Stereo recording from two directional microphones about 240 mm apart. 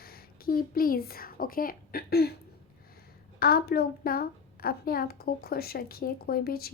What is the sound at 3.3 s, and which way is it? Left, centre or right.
Speech, left.